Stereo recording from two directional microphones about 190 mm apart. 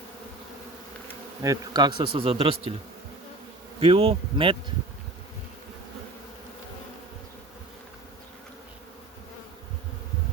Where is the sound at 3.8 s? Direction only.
30° right (ahead or behind).